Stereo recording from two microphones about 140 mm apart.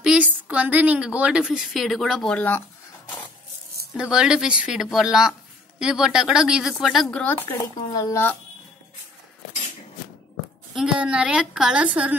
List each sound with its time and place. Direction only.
0.0 s a woman's voice: 5° right (ahead or behind); by 2.6 s 10° left (ahead or behind)
3.9 s speech: 5° right (ahead or behind)
7.4 s speech: 30° left (ahead or behind)
10.7 s a woman's voice: 5° right (ahead or behind)